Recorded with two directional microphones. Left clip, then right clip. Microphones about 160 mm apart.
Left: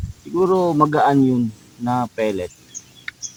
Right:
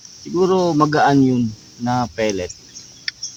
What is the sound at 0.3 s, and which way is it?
Speech, 20° right (ahead or behind).